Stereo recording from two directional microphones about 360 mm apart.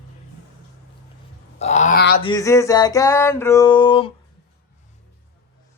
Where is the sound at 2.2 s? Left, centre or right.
Centre.